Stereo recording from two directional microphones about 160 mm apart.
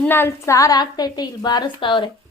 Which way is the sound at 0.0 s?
15° left (ahead or behind).